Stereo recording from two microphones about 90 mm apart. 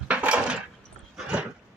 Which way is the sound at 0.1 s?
10° right (ahead or behind).